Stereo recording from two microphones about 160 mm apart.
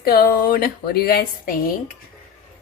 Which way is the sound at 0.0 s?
70° left (ahead or behind).